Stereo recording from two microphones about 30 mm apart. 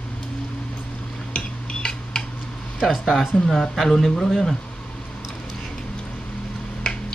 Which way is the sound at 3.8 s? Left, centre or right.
Centre.